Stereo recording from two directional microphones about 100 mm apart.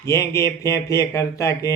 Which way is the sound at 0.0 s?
30° left (ahead or behind).